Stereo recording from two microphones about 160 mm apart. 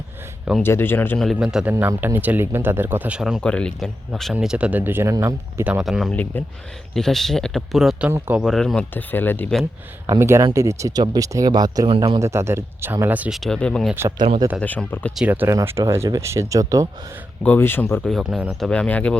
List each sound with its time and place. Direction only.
0.6 s speech: 15° left (ahead or behind)
1.2 s speech: centre (ahead or behind)
1.7 s speech: 15° right (ahead or behind)
5.8 s speech: centre (ahead or behind)
8.4 s speech: centre (ahead or behind)
10.1 s speech: 15° right (ahead or behind)
12.2 s speech: 15° right (ahead or behind)
13.4 s speech: 5° left (ahead or behind)
14.2 s speech: 30° right (ahead or behind)
14.6 s speech: 10° left (ahead or behind)
15.1 s speech: 10° right (ahead or behind)
17.4 s speech: 10° left (ahead or behind)
18.1 s speech: 5° right (ahead or behind)
18.7 s speech: 10° left (ahead or behind)